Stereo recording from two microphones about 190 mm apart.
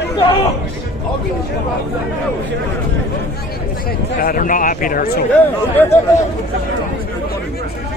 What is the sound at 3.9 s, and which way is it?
Speech, 50° left (ahead or behind).